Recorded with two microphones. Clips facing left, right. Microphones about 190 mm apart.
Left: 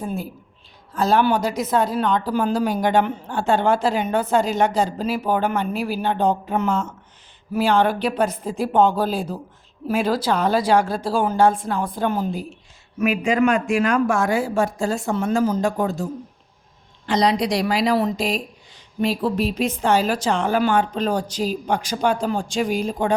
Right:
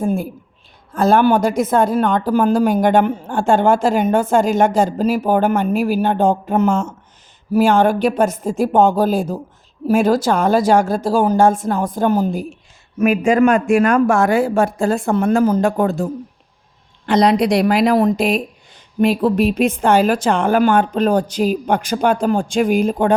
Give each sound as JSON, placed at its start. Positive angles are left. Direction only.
{"t": 0.0, "sound": "a woman's voice", "side_deg": -50}
{"t": 17.1, "sound": "a woman's voice", "side_deg": -55}